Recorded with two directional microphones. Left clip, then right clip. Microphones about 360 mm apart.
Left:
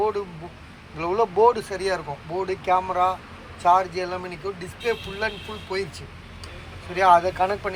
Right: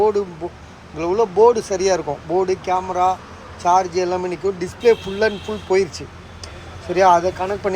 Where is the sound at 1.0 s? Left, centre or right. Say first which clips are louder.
Right 5 dB; centre.